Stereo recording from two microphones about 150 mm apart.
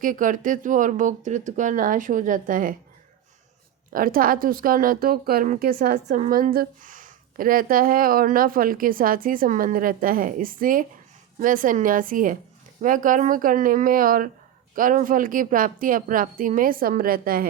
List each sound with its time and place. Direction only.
0.0 s speech: 60° right (ahead or behind)
3.9 s a woman's voice: 70° right (ahead or behind)
6.1 s a woman's voice: 55° right (ahead or behind); by 17.4 s 75° right (ahead or behind)